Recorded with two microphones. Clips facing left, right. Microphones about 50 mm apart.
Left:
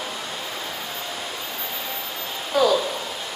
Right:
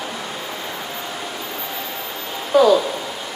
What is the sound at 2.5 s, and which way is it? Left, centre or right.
Speech, centre.